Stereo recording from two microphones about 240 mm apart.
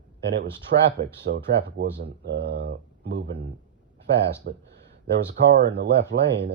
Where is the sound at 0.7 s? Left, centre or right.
Right.